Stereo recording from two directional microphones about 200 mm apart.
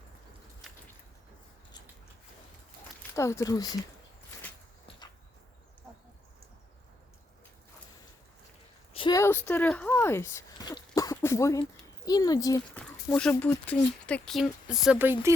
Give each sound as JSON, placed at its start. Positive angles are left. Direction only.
{"t": 3.2, "sound": "speech", "side_deg": 15}
{"t": 8.9, "sound": "a sound", "side_deg": 25}
{"t": 11.6, "sound": "speech", "side_deg": 20}
{"t": 13.1, "sound": "speech", "side_deg": 5}